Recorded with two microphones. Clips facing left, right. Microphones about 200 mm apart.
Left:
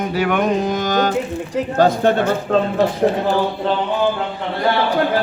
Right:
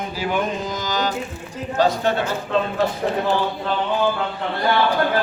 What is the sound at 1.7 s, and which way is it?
Speech, 55° left (ahead or behind).